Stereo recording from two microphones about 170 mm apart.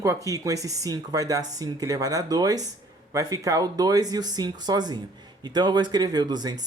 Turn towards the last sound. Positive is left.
turn(degrees=-25)  # may be behind; listen again after turning